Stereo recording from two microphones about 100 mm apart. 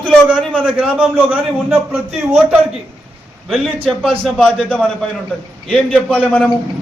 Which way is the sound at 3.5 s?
5° left (ahead or behind).